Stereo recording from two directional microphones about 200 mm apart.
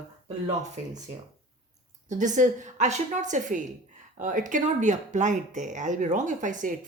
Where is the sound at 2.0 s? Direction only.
40° right (ahead or behind).